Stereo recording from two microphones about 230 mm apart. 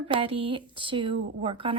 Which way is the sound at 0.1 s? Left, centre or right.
Right.